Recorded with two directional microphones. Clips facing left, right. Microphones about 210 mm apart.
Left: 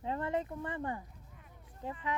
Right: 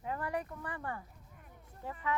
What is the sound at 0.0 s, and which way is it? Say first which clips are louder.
Speech: left 3 dB; 25° left (ahead or behind).